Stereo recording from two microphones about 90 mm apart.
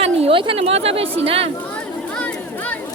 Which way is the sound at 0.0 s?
80° right.